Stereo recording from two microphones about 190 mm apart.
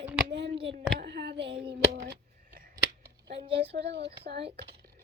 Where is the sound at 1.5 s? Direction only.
25° right (ahead or behind).